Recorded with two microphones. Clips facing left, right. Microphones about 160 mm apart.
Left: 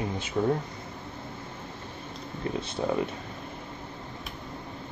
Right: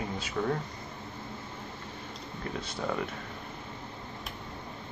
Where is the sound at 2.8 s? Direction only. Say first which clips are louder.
Left 5 dB; 25° left (ahead or behind).